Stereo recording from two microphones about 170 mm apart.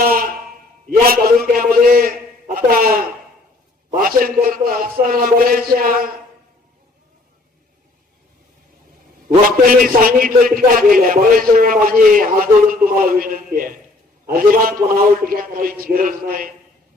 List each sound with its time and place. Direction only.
0.0 s a sound: 60° right (ahead or behind)
2.6 s a man's voice: 60° right (ahead or behind)
9.6 s a man's voice: 55° right (ahead or behind)